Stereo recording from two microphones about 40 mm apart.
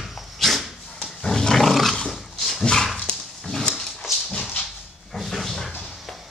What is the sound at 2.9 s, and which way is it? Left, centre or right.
Dog, centre.